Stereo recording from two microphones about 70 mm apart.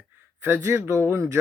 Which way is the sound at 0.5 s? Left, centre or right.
Right.